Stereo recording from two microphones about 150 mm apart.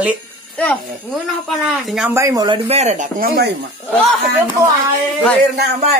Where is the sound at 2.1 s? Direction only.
25° right (ahead or behind).